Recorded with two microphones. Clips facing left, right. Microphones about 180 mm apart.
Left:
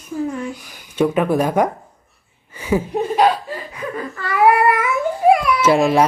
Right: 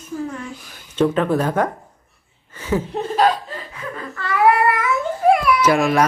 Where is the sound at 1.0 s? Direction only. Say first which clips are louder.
Left 1 dB; 10° left (ahead or behind).